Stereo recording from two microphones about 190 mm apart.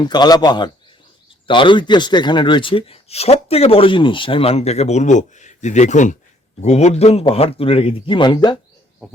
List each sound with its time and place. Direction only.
0.0 s a man's voice: 20° left (ahead or behind)
9.0 s owl: centre (ahead or behind)